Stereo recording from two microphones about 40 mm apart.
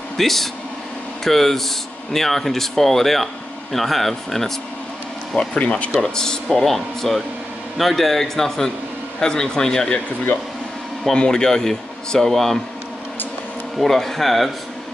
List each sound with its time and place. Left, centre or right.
0.2 s speech: centre
5.3 s speech: left
5.9 s speech: centre
6.6 s speech: centre
11.1 s speech: centre
13.7 s speech: centre